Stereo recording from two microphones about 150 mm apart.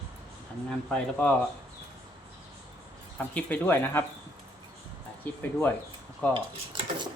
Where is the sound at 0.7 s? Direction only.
5° left (ahead or behind).